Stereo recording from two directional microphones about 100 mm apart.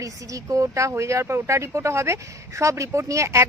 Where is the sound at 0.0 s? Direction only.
35° right (ahead or behind).